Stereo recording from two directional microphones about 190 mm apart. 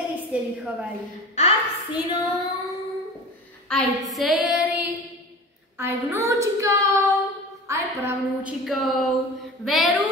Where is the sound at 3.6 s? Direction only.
Centre (ahead or behind); by 8.5 s 15° right (ahead or behind).